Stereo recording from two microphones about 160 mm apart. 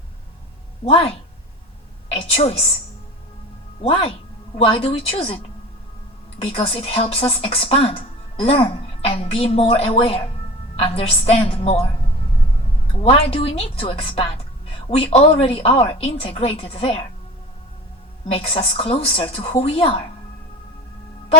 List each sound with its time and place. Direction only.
0.9 s speech: 40° left (ahead or behind)
3.8 s speech: 40° left (ahead or behind)
13.0 s speech: 40° left (ahead or behind)
18.3 s speech: 40° left (ahead or behind)